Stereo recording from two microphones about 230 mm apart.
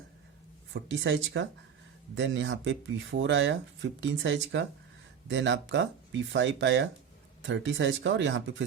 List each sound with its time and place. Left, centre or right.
0.7 s speech: right